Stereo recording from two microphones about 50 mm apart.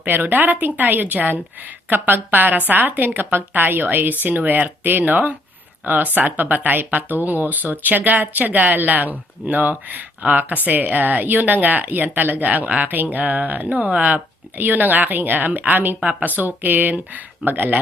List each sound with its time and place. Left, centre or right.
0.0 s speech: right